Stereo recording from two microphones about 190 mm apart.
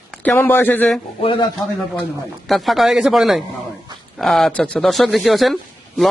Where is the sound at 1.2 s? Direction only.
25° left (ahead or behind).